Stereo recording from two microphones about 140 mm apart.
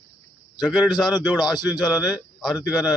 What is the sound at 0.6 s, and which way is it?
Speech, centre (ahead or behind).